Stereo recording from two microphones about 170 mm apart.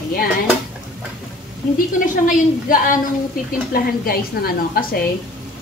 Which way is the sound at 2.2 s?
55° left (ahead or behind).